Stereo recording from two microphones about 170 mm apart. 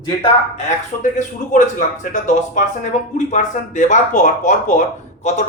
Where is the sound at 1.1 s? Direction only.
45° left (ahead or behind).